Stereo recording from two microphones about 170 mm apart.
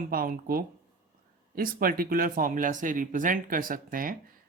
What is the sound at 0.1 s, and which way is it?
Speech, 60° right (ahead or behind).